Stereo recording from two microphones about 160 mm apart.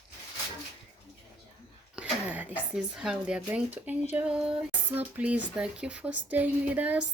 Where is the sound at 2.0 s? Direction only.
10° right (ahead or behind).